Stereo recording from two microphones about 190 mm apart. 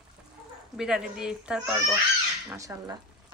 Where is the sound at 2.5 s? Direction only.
15° right (ahead or behind).